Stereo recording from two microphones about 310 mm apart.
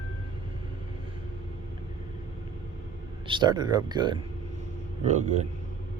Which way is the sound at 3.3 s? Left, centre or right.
Centre.